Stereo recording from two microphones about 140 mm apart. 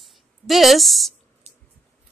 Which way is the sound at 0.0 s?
Centre (ahead or behind).